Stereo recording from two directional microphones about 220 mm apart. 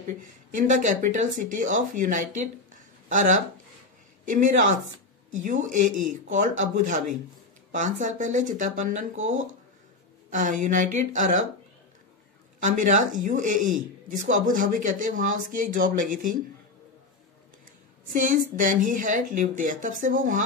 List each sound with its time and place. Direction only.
0.2 s speech: 35° right (ahead or behind)
2.7 s a sound: 35° right (ahead or behind)
4.3 s speech: 35° right (ahead or behind)
9.3 s speech: 65° right (ahead or behind)
10.3 s speech: 35° right (ahead or behind)
12.6 s speech: 35° right (ahead or behind)
18.1 s speech: 35° right (ahead or behind)